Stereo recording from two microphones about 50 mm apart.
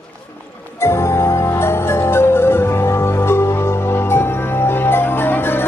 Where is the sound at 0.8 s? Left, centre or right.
Left.